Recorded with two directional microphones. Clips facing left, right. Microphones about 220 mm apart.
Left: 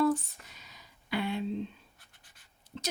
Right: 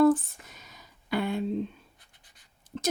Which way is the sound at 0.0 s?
50° right (ahead or behind).